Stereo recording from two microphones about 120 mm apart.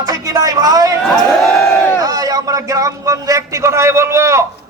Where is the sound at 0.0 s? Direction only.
30° right (ahead or behind).